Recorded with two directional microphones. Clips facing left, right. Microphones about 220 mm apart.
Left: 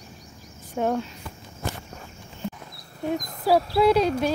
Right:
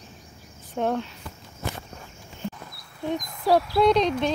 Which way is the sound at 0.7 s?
10° left (ahead or behind).